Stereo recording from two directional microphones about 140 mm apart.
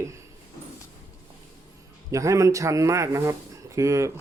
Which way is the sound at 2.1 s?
20° right (ahead or behind).